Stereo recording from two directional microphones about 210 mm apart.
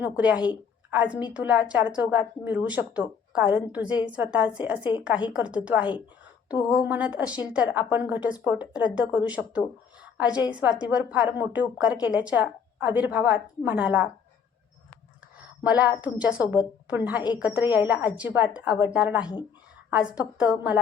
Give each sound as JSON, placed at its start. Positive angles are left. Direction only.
{"t": 0.0, "sound": "a woman's voice", "side_deg": -5}
{"t": 4.8, "sound": "speech", "side_deg": 20}
{"t": 5.3, "sound": "a woman's voice", "side_deg": -5}
{"t": 15.6, "sound": "a woman's voice", "side_deg": -5}